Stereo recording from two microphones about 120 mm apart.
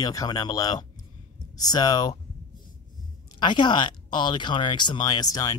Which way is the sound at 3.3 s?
40° left (ahead or behind).